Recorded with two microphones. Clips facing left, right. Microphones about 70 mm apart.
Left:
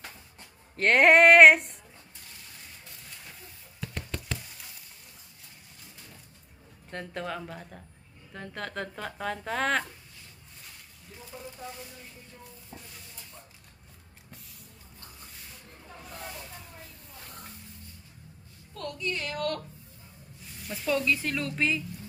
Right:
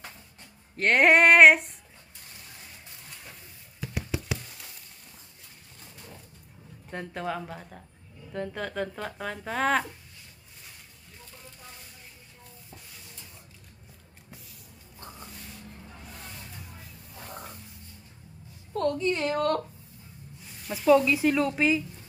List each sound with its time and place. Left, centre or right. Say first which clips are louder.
0.8 s speech: left 1 dB; centre
3.8 s a sound: right 4 dB; centre
6.9 s speech: right 2 dB; centre
18.7 s a woman's voice: right 8 dB; right
20.7 s speech: right 7 dB; centre